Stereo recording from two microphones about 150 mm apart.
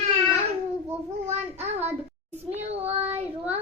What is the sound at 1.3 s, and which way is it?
Child singing, 45° right (ahead or behind).